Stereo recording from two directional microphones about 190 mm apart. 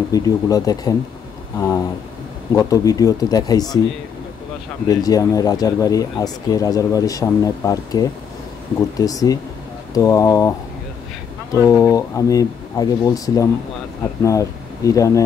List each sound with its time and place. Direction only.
0.1 s speech: 20° left (ahead or behind)
2.5 s speech: 20° left (ahead or behind)
4.8 s speech: 20° left (ahead or behind)
11.5 s speech: 20° left (ahead or behind)